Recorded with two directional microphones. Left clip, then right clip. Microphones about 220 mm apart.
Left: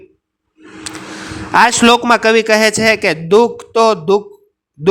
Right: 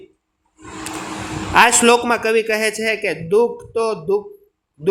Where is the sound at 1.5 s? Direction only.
50° left (ahead or behind).